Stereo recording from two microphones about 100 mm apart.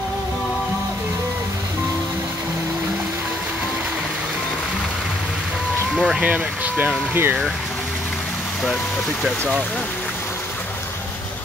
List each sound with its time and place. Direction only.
5.9 s speech: 5° right (ahead or behind)
6.2 s speech: 15° right (ahead or behind)